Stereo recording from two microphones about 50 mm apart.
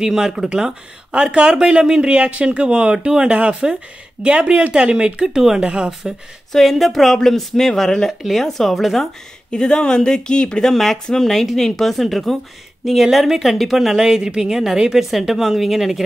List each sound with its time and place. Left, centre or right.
0.0 s speech: centre
6.5 s a woman's voice: centre
9.5 s speech: centre
10.6 s a woman's voice: centre